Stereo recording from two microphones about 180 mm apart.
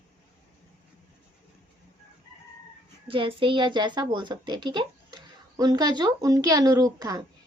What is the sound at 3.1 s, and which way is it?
A woman's voice, 30° right (ahead or behind).